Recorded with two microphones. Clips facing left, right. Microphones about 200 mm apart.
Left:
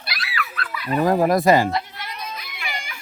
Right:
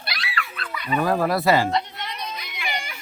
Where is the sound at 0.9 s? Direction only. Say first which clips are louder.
Left 4 dB; 15° left (ahead or behind).